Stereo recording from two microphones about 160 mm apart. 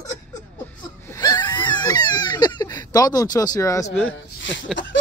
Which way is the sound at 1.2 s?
25° left (ahead or behind).